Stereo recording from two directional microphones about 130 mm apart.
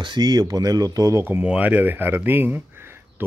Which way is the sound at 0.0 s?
35° right (ahead or behind).